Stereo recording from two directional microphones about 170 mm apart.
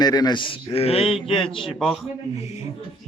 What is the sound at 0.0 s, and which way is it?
A man's voice, 25° left (ahead or behind).